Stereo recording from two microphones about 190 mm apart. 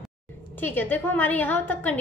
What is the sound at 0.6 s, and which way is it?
A woman's voice, 10° left (ahead or behind).